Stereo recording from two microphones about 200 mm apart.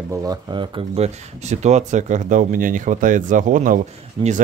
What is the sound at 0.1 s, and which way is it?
Speech, 20° right (ahead or behind).